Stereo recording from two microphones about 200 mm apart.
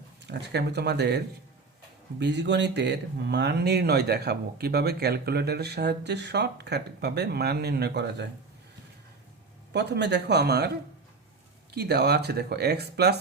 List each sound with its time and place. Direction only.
0.3 s speech: 55° right (ahead or behind)
9.7 s speech: 60° right (ahead or behind)
11.7 s speech: 55° right (ahead or behind)